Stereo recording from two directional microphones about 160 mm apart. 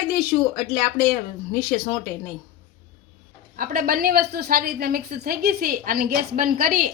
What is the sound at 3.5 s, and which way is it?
A woman's voice, 65° right (ahead or behind).